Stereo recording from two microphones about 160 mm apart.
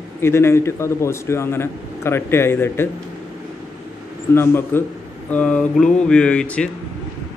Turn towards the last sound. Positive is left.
turn(degrees=5)  # may be behind; listen again after turning